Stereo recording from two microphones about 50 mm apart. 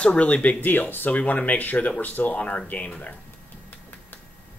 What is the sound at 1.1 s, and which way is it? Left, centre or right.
Speech, left.